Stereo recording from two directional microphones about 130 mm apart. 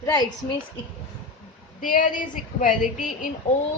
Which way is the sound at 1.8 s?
90° left.